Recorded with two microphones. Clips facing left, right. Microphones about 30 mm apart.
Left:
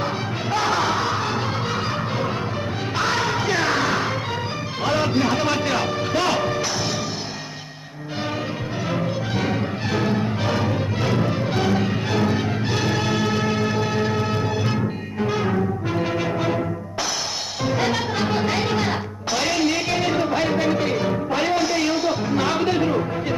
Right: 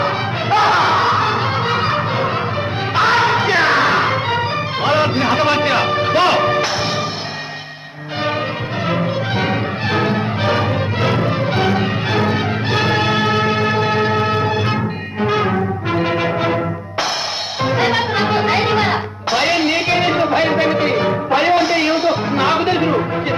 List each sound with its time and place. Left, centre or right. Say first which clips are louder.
0.5 s music: right 8 dB; right
8.9 s music: right 6 dB; right